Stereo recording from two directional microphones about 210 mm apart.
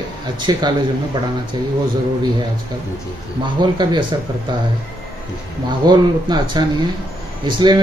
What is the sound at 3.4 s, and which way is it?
Speech, 20° right (ahead or behind).